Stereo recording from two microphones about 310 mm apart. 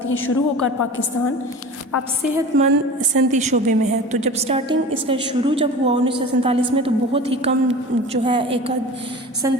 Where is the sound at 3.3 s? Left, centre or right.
Right.